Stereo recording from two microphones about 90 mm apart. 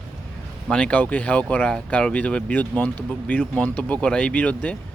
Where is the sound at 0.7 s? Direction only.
15° left (ahead or behind).